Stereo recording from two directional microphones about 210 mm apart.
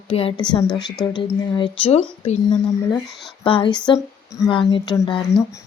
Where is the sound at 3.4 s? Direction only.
25° left (ahead or behind).